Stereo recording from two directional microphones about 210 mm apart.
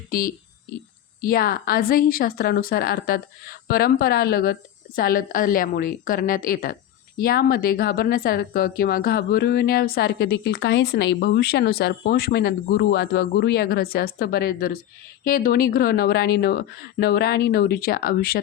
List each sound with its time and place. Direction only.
0.1 s a woman's voice: 45° left (ahead or behind)